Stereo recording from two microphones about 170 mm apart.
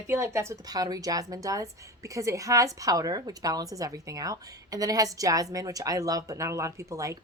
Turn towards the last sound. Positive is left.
turn(degrees=-20)  # may be behind; listen again after turning